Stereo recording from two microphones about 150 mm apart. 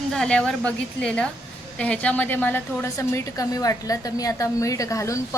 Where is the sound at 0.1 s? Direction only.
5° left (ahead or behind).